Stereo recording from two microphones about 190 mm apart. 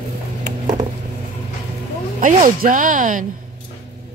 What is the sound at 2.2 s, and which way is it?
Speech, 45° right (ahead or behind).